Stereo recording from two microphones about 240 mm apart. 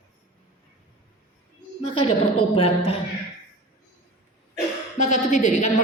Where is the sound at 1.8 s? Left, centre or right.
Left.